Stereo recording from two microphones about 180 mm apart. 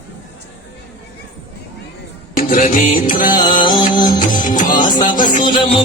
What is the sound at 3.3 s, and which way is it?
Music, 25° left (ahead or behind).